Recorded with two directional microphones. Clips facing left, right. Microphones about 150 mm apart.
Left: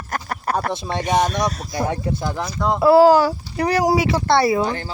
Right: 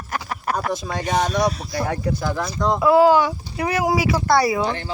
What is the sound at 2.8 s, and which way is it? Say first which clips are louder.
Speech: left 3 dB; 35° left (ahead or behind).